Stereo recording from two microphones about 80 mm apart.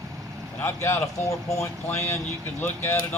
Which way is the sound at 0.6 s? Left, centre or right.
Left.